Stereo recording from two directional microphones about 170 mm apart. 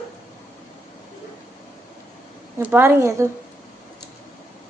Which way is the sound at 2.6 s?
10° right (ahead or behind).